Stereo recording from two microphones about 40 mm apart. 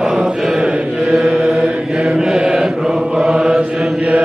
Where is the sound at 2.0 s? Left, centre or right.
Centre.